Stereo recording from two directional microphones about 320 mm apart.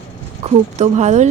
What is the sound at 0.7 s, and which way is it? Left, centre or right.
Speech, right.